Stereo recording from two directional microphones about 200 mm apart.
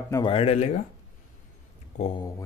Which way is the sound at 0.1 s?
25° left (ahead or behind).